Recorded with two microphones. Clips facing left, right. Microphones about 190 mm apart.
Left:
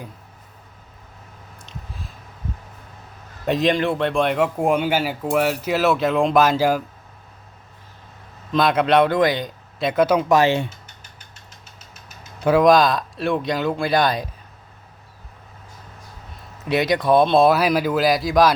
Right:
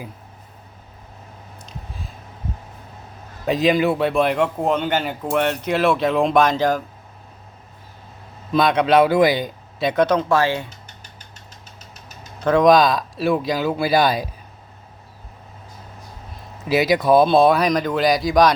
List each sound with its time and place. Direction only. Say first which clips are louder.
1.5 s a sound: right 1 dB; centre (ahead or behind)
3.4 s speech: right 2 dB; centre (ahead or behind)
8.5 s speech: right 1 dB; centre (ahead or behind); by 10.7 s 20° left (ahead or behind)
12.5 s speech: right 1 dB; centre (ahead or behind)
16.6 s speech: right 2 dB; 5° right (ahead or behind)